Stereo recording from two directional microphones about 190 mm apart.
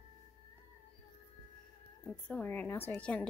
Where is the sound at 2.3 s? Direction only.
10° left (ahead or behind).